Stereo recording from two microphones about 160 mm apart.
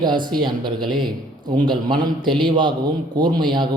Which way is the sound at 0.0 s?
30° right (ahead or behind).